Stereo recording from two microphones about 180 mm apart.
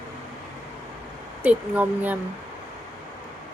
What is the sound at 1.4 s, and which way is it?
Speech, 10° right (ahead or behind).